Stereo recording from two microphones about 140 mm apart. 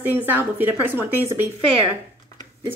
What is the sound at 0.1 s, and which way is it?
Speech, 15° right (ahead or behind).